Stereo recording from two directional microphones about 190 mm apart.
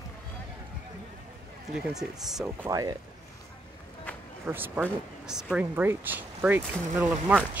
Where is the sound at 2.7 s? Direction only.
20° right (ahead or behind).